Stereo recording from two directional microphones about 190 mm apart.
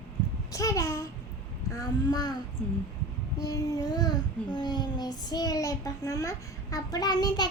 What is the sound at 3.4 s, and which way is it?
Child singing, 20° left (ahead or behind).